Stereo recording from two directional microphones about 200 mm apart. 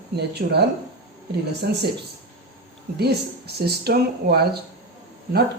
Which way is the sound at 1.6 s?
55° right (ahead or behind).